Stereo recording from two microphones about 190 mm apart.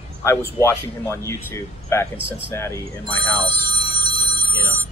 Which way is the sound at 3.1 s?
25° right (ahead or behind).